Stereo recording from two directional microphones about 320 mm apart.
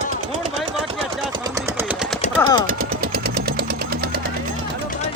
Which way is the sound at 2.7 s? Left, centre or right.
Right.